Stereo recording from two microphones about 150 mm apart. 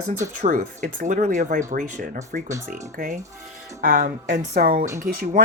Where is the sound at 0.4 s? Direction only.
55° right (ahead or behind).